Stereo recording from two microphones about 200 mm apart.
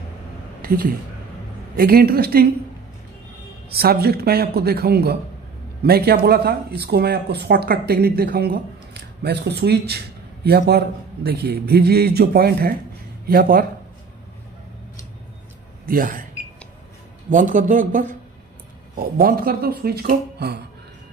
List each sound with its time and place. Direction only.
0.6 s a woman's voice: 45° right (ahead or behind)
3.7 s speech: 50° right (ahead or behind)
15.9 s speech: 45° right (ahead or behind)
17.3 s a man's voice: 40° right (ahead or behind)